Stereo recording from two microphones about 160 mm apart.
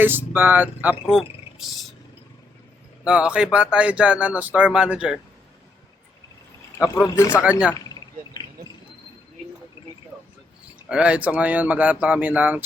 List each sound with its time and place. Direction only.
0.0 s speech: 10° right (ahead or behind)
3.0 s speech: 5° right (ahead or behind)
7.1 s speech: 20° left (ahead or behind)
7.7 s a sound: 25° left (ahead or behind)
10.8 s speech: 5° right (ahead or behind)